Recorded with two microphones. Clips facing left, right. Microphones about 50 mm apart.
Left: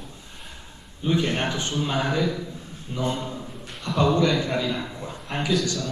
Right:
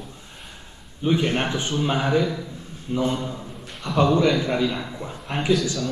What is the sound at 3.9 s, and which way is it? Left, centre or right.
Speech, centre.